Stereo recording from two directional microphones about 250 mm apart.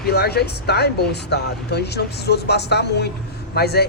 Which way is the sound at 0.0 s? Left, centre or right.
Left.